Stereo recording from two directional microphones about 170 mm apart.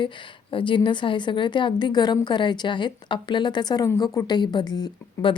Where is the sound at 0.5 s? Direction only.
30° left (ahead or behind).